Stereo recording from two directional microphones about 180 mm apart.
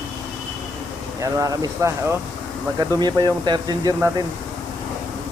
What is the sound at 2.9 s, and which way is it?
Speech, 25° right (ahead or behind).